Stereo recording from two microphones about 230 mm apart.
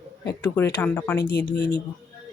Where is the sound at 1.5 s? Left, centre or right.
Left.